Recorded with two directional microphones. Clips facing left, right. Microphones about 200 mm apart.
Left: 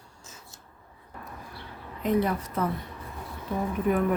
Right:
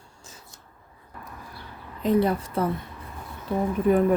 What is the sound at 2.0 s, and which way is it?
Speech, 30° right (ahead or behind).